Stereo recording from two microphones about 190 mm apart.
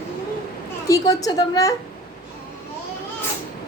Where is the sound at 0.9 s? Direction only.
20° left (ahead or behind).